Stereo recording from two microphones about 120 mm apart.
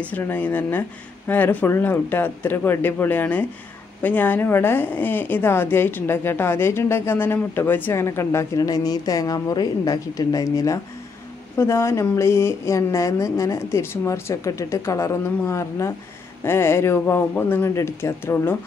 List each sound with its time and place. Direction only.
0.0 s a woman's voice: 15° left (ahead or behind)